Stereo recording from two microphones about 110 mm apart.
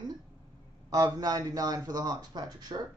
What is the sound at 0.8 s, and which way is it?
A man's voice, 35° right (ahead or behind).